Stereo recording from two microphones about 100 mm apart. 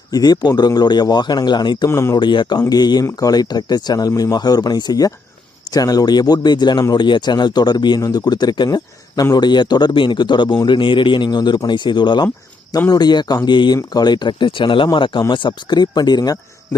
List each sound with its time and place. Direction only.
0.1 s a man's voice: 40° left (ahead or behind)
1.9 s speech: 25° left (ahead or behind)
2.1 s a man's voice: 50° left (ahead or behind)